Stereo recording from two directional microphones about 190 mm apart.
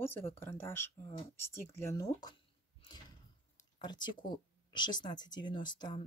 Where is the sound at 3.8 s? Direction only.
25° left (ahead or behind).